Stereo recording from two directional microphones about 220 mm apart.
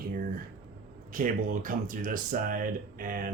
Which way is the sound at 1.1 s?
40° right (ahead or behind).